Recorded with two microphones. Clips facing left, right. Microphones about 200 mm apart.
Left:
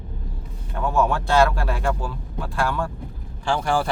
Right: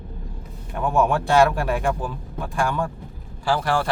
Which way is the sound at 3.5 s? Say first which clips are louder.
Even; centre (ahead or behind).